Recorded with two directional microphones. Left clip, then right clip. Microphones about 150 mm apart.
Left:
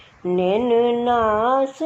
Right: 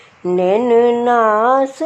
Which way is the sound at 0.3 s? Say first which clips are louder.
Right 5 dB; 25° right (ahead or behind).